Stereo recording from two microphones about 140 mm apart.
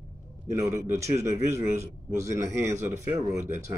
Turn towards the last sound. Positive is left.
turn(degrees=-20)  # may be behind; listen again after turning